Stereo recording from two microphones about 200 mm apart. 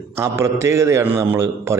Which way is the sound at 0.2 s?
15° right (ahead or behind).